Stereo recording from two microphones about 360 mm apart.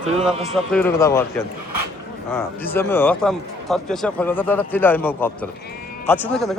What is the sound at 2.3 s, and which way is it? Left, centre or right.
Speech, centre.